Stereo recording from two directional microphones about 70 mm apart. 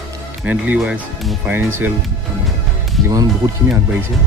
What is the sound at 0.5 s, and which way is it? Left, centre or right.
Speech, right.